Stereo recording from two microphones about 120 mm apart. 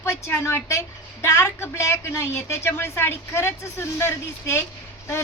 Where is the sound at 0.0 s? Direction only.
20° left (ahead or behind).